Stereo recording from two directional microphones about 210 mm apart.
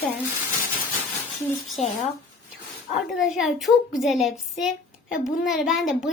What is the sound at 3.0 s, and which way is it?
A child's voice, centre (ahead or behind).